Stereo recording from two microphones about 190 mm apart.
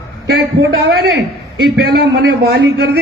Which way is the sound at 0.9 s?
55° right (ahead or behind).